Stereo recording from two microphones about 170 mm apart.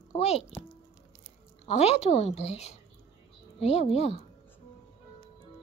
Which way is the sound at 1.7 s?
40° left (ahead or behind).